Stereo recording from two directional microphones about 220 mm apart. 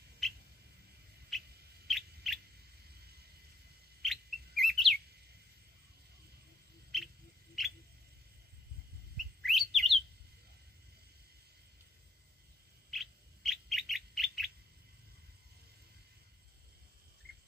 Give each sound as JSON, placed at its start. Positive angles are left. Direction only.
{"t": 0.2, "sound": "a sound", "side_deg": 0}
{"t": 1.3, "sound": "owl", "side_deg": 0}
{"t": 4.0, "sound": "bird", "side_deg": 0}
{"t": 6.9, "sound": "owl", "side_deg": 0}
{"t": 7.6, "sound": "a sound", "side_deg": 0}
{"t": 9.4, "sound": "bird", "side_deg": 0}
{"t": 12.9, "sound": "bird", "side_deg": 0}